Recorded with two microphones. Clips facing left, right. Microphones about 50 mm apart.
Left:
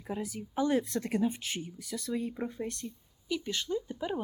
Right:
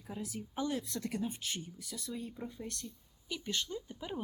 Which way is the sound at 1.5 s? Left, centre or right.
Centre.